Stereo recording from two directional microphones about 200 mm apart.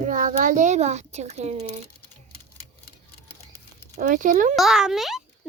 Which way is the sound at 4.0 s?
40° right (ahead or behind).